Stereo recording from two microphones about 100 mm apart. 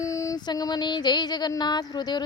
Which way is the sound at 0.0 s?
30° left (ahead or behind).